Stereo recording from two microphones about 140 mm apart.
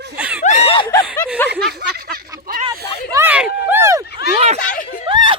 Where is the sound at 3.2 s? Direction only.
10° right (ahead or behind).